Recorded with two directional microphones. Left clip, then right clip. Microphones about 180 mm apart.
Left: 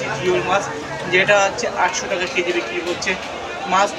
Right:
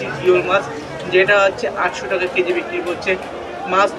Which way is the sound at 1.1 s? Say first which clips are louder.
Right 2 dB; 25° left (ahead or behind).